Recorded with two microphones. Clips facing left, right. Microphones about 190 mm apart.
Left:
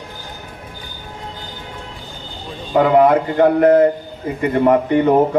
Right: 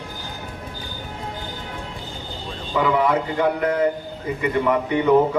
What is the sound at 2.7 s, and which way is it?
A man's voice, 50° left (ahead or behind).